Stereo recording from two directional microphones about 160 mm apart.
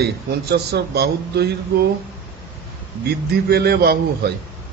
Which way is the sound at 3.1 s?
80° right.